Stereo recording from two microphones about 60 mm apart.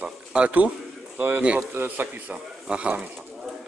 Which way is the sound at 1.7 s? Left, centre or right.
Right.